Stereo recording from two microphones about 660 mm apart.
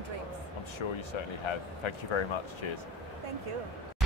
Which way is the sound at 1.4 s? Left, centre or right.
Left.